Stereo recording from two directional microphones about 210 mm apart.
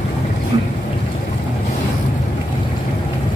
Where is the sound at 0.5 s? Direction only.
25° right (ahead or behind).